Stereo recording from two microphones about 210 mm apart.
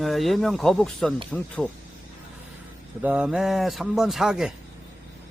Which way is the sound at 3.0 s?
5° right (ahead or behind).